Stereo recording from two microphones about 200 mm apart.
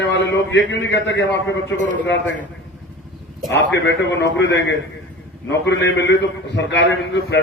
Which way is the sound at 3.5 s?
60° left (ahead or behind).